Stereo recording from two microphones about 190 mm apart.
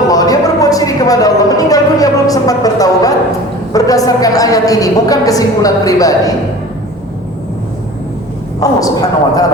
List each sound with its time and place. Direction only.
0.1 s a sound: 20° left (ahead or behind)
3.7 s a woman's voice: 20° left (ahead or behind)
8.6 s a woman's voice: 20° left (ahead or behind)